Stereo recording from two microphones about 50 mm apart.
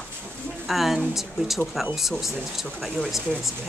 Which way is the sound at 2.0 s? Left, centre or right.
Centre.